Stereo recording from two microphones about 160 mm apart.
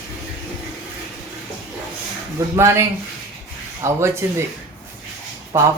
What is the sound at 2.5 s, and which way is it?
Speech, 15° right (ahead or behind).